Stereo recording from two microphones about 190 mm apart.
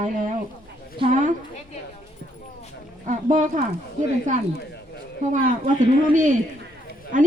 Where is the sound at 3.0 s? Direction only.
45° right (ahead or behind).